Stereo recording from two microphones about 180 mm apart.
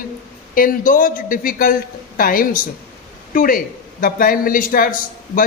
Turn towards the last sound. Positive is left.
turn(degrees=50)  # may be behind; listen again after turning